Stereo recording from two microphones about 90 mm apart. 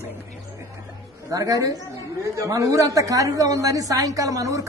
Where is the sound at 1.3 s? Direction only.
40° right (ahead or behind).